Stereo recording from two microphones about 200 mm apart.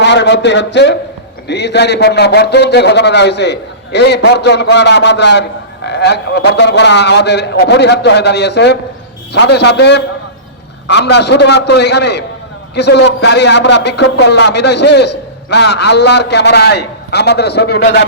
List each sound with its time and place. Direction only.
0.0 s a man's voice: 60° left (ahead or behind)